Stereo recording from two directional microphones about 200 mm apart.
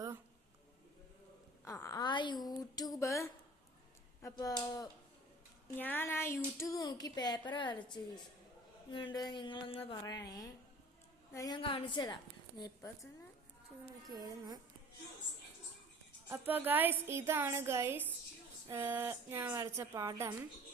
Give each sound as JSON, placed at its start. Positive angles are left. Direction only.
{"t": 1.6, "sound": "speech", "side_deg": 15}
{"t": 5.7, "sound": "a woman's voice", "side_deg": 10}
{"t": 14.1, "sound": "a woman's voice", "side_deg": -20}
{"t": 16.3, "sound": "a woman's voice", "side_deg": -10}